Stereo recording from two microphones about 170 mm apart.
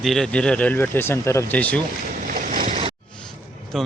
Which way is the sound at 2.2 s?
55° right (ahead or behind).